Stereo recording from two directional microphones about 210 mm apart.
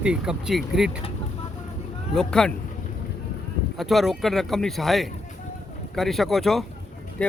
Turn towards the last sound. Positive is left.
turn(degrees=0)  # may be behind; listen again after turning